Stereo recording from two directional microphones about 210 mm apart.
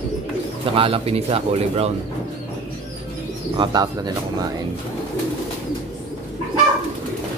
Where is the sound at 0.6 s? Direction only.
25° right (ahead or behind).